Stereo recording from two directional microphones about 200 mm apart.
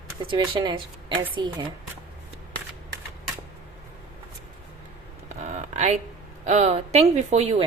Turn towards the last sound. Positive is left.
turn(degrees=-30)  # may be behind; listen again after turning